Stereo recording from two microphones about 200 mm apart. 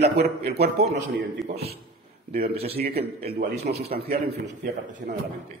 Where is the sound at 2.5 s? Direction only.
30° right (ahead or behind).